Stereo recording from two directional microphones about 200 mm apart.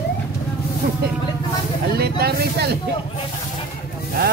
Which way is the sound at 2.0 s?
50° right (ahead or behind).